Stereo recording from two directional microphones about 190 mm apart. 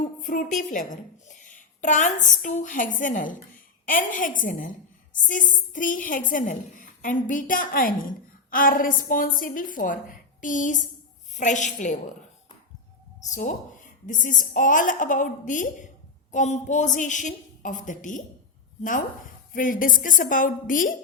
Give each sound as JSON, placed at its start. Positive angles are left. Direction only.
{"t": 0.0, "sound": "a woman's voice", "side_deg": 45}
{"t": 13.3, "sound": "a woman's voice", "side_deg": 40}